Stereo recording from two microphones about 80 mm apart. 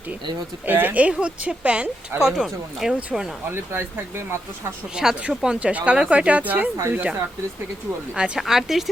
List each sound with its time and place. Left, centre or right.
0.6 s speech: right; by 3.2 s centre
3.5 s speech: right
4.9 s speech: centre
6.7 s speech: right
8.1 s speech: centre